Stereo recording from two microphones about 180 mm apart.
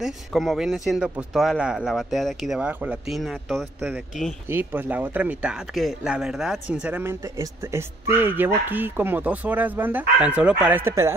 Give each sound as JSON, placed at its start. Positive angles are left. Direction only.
{"t": 0.0, "sound": "a man's voice", "side_deg": 0}